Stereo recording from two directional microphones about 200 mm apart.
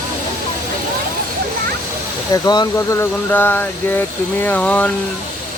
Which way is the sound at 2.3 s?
20° left (ahead or behind).